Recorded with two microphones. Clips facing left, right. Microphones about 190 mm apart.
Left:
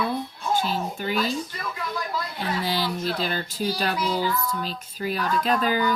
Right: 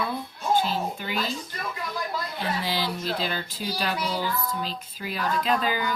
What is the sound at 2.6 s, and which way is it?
Speech, 45° left (ahead or behind).